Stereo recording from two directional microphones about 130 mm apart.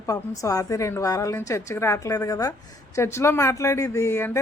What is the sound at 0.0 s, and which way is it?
Speech, 25° left (ahead or behind).